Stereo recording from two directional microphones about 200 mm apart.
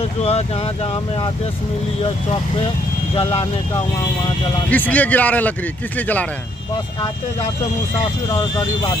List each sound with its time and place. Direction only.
0.2 s speech: 30° left (ahead or behind)
3.2 s speech: 30° left (ahead or behind)
4.6 s speech: 10° left (ahead or behind)
8.3 s speech: 20° left (ahead or behind)